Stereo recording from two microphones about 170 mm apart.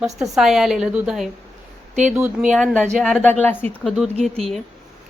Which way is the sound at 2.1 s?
15° right (ahead or behind).